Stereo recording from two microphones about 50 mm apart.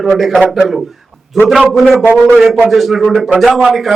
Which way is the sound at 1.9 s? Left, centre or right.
Right.